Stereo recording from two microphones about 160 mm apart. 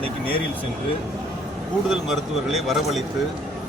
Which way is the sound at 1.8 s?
Centre (ahead or behind).